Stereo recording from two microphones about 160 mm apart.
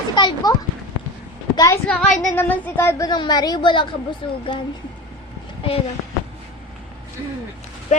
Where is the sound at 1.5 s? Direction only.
20° left (ahead or behind).